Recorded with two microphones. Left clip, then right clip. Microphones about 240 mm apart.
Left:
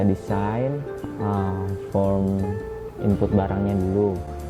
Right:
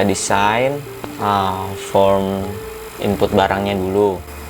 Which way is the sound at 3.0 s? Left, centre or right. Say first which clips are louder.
Right 8 dB; centre.